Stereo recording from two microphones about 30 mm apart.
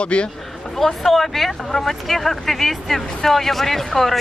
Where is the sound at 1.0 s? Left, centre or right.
Centre.